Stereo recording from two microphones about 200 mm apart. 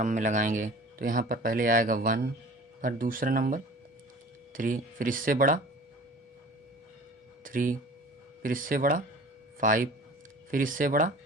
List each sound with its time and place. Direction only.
0.0 s speech: 40° right (ahead or behind)
7.4 s speech: 40° right (ahead or behind)